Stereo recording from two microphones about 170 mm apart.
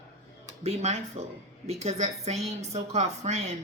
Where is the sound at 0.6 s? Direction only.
40° right (ahead or behind).